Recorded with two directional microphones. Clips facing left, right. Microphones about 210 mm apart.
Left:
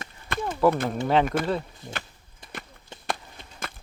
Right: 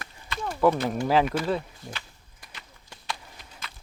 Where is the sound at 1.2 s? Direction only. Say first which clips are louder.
Left 2 dB; 50° left (ahead or behind).